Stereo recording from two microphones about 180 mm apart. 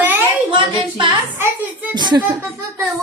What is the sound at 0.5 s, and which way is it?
Speech, 30° right (ahead or behind).